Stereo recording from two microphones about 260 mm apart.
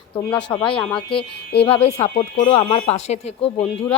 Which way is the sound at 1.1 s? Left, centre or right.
Left.